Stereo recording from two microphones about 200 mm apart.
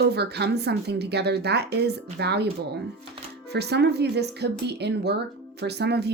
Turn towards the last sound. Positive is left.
turn(degrees=-55)  # may be behind; listen again after turning